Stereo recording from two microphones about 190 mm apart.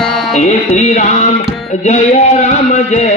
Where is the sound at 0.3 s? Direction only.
40° left (ahead or behind).